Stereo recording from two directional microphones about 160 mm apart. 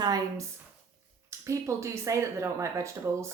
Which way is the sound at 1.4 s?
20° right (ahead or behind).